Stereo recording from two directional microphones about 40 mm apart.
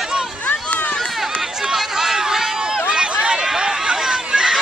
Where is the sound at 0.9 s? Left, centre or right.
Centre.